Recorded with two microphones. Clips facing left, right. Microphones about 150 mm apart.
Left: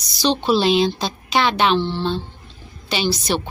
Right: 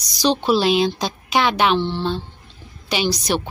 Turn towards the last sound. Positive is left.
turn(degrees=-15)  # may be behind; listen again after turning